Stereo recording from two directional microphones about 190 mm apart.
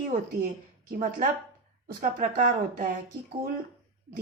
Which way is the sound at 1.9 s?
45° right (ahead or behind).